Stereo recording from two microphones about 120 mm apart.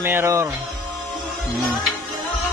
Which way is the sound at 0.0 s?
20° right (ahead or behind).